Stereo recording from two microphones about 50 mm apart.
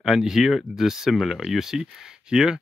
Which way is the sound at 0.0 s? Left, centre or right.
Centre.